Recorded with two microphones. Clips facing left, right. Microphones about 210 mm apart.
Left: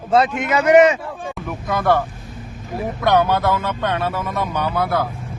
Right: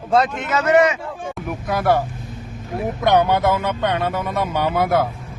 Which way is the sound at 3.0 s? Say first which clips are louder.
Even; 20° right (ahead or behind).